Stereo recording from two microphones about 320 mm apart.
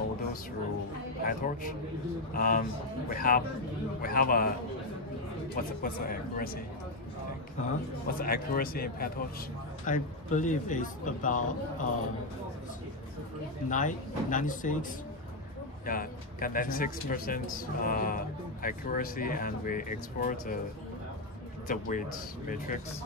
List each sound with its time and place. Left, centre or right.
1.2 s speech: left
5.8 s speech: left
7.6 s speech: left
13.7 s speech: left
21.6 s speech: left